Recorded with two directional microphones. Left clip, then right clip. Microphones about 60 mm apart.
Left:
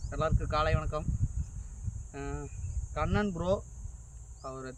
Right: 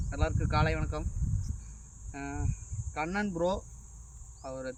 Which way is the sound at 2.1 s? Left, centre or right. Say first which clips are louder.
Right 1 dB; left.